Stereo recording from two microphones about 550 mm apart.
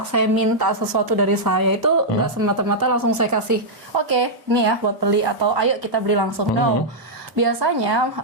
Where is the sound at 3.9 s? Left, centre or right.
Right.